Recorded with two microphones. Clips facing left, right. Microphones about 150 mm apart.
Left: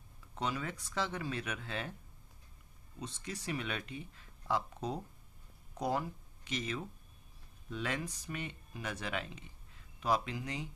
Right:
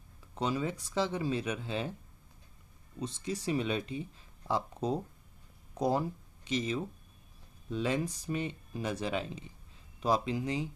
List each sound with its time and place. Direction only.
0.4 s speech: 25° right (ahead or behind)
3.0 s speech: 30° right (ahead or behind)